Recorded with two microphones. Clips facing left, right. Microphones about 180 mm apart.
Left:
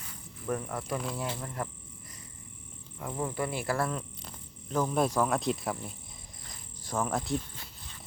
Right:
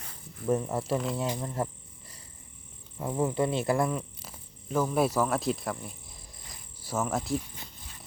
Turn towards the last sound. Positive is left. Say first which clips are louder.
# right 1 dB
turn(degrees=0)  # may be behind; listen again after turning